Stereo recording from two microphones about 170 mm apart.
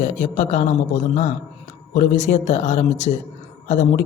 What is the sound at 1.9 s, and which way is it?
A man's voice, 45° left (ahead or behind).